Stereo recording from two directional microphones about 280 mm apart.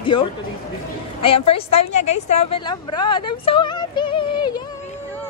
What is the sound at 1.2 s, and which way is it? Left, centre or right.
A woman's voice, centre.